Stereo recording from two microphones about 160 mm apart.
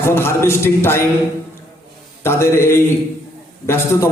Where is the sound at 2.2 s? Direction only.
15° left (ahead or behind).